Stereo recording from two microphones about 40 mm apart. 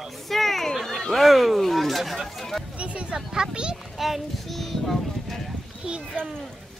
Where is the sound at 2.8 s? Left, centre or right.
Right.